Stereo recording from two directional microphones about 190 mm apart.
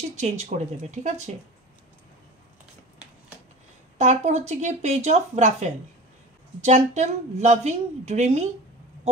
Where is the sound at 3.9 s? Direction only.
35° right (ahead or behind).